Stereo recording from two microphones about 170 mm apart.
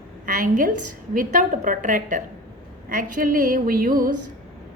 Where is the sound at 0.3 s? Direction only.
50° right (ahead or behind).